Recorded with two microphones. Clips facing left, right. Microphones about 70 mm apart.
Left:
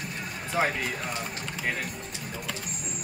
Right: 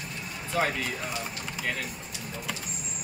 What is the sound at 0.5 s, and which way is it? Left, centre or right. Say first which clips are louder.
Speech: left 1 dB; centre.